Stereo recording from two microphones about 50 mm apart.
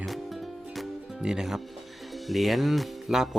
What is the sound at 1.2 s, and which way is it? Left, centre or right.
Music, centre.